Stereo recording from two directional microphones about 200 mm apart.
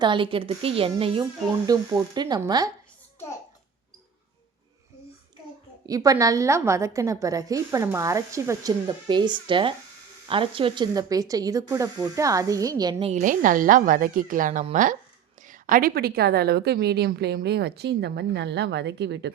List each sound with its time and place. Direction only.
0.0 s speech: 25° right (ahead or behind)
5.8 s a woman's voice: 15° right (ahead or behind)
13.1 s a woman's voice: 40° right (ahead or behind); by 19.3 s 60° right (ahead or behind)